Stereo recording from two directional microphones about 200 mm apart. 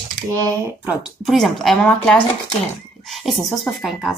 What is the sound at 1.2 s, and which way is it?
Speech, centre (ahead or behind).